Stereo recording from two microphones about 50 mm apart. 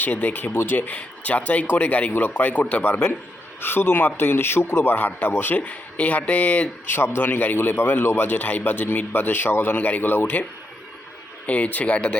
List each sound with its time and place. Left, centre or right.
0.0 s a man's voice: left
0.5 s a man's voice: left
0.8 s a man's voice: left
3.6 s a man's voice: left
11.4 s speech: left